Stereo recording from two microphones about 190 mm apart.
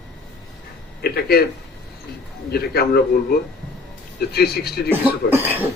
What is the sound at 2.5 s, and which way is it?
Speech, 55° left (ahead or behind).